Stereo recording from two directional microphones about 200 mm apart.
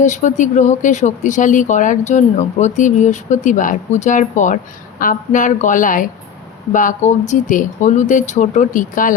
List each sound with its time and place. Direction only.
0.0 s speech: 35° left (ahead or behind)